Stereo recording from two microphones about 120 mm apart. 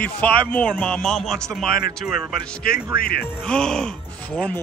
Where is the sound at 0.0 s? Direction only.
10° left (ahead or behind).